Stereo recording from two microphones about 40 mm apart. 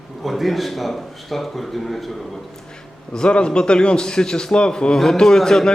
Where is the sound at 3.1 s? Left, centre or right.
Left.